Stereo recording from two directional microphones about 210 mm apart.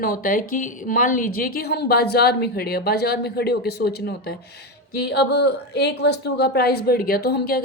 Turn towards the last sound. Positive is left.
turn(degrees=50)  # may be behind; listen again after turning